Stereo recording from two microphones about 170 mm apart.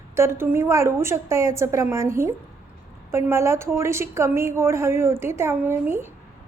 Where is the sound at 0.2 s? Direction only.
15° right (ahead or behind).